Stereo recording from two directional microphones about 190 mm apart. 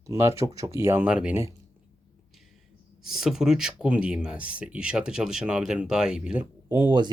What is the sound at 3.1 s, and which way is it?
Speech, centre (ahead or behind).